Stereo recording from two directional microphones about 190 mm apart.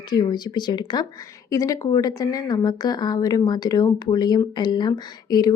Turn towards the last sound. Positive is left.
turn(degrees=20)  # may be behind; listen again after turning